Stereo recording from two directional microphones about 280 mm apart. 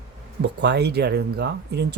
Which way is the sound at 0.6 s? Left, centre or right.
Right.